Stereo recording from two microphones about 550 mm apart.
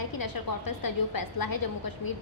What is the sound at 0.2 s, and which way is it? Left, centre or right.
A woman's voice, left.